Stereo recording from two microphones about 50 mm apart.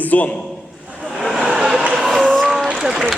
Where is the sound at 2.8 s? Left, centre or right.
Centre.